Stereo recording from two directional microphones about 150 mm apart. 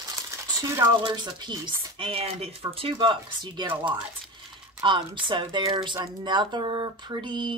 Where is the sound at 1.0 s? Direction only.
30° right (ahead or behind).